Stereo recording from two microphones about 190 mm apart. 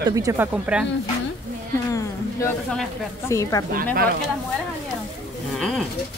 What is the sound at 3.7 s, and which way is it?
Speech, 50° right (ahead or behind).